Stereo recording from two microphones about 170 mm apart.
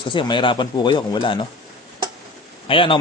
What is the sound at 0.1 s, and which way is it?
Speech, 30° left (ahead or behind).